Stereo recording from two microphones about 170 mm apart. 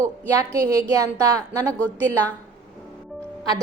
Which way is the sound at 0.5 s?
20° right (ahead or behind).